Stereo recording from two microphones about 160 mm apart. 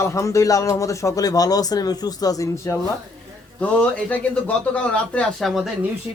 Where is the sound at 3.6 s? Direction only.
10° left (ahead or behind).